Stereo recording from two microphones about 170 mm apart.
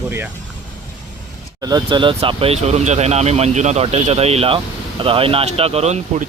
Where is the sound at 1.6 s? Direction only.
25° right (ahead or behind).